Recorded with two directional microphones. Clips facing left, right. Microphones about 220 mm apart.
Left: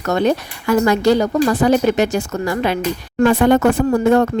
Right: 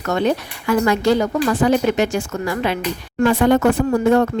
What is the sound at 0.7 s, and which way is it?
A woman's voice, 40° left (ahead or behind).